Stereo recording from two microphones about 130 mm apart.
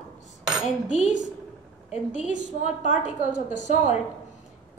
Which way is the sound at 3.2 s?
60° right (ahead or behind).